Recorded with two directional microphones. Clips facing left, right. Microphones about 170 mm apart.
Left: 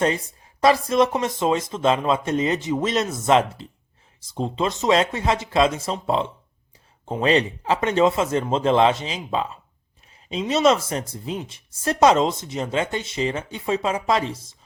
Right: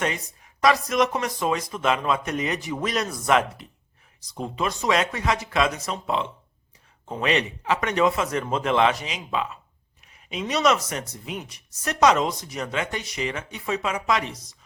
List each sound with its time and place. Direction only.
0.0 s speech: 30° left (ahead or behind)